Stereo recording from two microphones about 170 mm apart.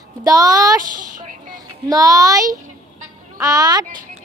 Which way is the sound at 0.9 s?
50° right (ahead or behind).